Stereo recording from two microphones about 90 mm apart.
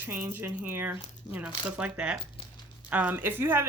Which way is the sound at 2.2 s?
75° left (ahead or behind).